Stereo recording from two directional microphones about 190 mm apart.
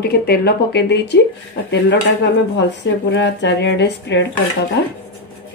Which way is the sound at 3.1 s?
70° left (ahead or behind).